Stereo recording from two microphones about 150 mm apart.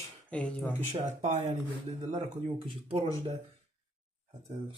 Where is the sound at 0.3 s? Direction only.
5° left (ahead or behind).